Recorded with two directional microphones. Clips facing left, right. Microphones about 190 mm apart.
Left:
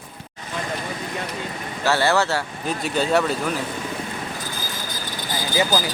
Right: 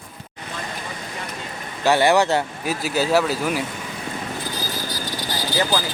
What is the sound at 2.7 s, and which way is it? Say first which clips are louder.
Speech: right 1 dB; 5° right (ahead or behind).